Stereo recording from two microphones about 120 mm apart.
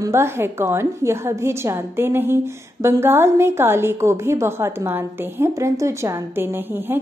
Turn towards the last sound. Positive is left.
turn(degrees=-15)  # may be behind; listen again after turning